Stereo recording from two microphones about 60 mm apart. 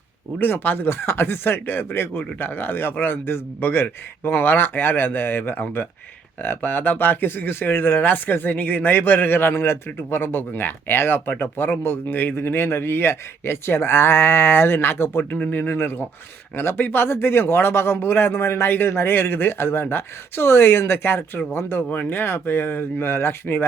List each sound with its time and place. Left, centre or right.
0.3 s speech: left
21.8 s speech: left